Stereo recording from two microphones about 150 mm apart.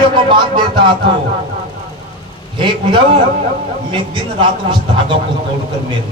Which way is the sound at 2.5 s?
35° right (ahead or behind).